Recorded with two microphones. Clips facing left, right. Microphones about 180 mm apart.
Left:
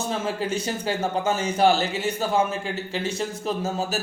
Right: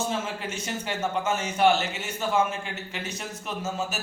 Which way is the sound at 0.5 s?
35° left (ahead or behind).